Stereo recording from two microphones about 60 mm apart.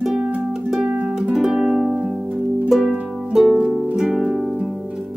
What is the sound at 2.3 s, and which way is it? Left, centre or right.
Harp, right.